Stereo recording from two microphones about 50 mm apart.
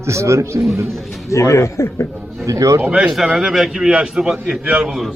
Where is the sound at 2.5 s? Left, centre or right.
Right.